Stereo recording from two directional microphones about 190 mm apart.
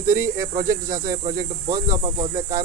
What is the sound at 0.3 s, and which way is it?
Speech, 45° right (ahead or behind).